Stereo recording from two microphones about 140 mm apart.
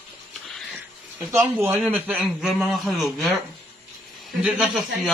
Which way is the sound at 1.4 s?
15° right (ahead or behind).